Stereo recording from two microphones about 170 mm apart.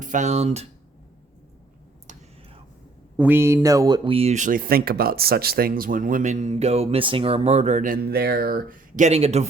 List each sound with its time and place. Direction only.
0.0 s speech: 45° right (ahead or behind)
3.2 s speech: 10° right (ahead or behind); by 9.0 s 60° right (ahead or behind)
9.0 s a man's voice: 40° right (ahead or behind)